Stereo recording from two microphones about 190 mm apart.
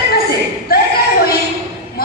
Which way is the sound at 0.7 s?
50° left (ahead or behind).